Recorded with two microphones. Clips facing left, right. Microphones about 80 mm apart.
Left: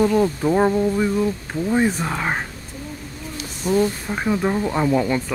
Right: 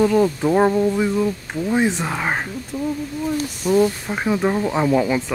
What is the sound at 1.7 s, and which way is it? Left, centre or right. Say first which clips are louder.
Speech: even; centre.